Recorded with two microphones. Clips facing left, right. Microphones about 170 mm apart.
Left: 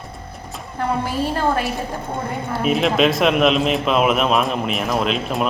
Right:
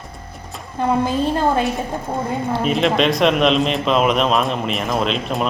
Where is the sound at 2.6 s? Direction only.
Centre (ahead or behind).